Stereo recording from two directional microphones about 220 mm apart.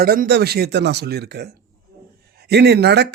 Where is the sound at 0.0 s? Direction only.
45° right (ahead or behind).